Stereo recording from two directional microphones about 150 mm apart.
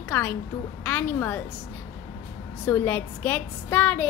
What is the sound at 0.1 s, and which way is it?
A woman's voice, 10° left (ahead or behind).